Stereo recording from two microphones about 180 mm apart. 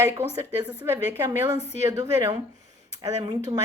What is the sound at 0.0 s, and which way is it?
A woman's voice, 15° right (ahead or behind).